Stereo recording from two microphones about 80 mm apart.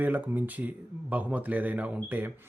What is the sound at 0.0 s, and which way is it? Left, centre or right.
Speech, right.